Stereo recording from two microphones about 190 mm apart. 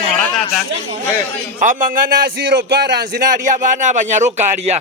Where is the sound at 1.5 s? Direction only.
45° right (ahead or behind).